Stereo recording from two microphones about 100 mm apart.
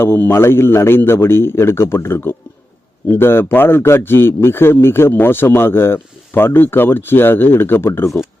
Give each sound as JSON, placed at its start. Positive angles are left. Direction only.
{"t": 0.0, "sound": "a man's voice", "side_deg": 25}